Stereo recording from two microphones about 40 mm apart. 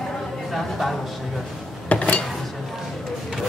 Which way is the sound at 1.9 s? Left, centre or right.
Left.